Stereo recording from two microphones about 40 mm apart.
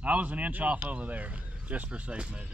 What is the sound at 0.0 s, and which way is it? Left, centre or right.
Speech, right.